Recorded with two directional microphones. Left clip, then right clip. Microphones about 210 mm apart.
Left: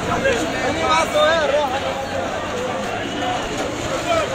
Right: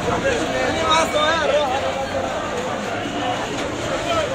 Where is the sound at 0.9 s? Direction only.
35° right (ahead or behind).